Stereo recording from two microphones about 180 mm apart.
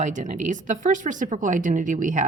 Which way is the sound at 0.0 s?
45° right (ahead or behind).